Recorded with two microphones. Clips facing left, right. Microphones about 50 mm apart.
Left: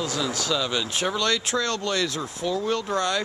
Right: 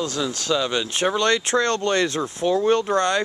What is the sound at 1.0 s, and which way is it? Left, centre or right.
Speech, right.